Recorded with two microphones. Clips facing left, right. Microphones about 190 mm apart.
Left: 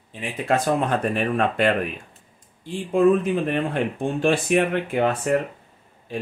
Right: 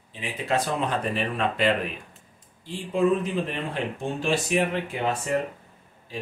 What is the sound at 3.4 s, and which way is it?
Speech, 55° left (ahead or behind).